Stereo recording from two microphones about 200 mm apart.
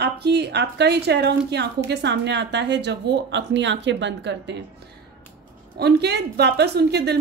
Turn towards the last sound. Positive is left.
turn(degrees=-55)  # may be behind; listen again after turning